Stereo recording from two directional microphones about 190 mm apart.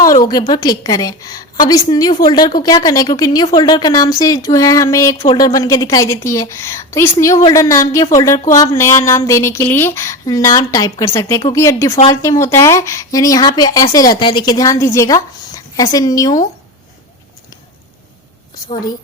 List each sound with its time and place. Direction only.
0.3 s a woman's voice: 20° left (ahead or behind)